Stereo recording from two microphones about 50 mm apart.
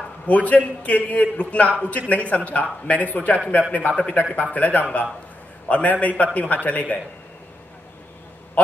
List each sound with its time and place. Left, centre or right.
0.3 s a man's voice: left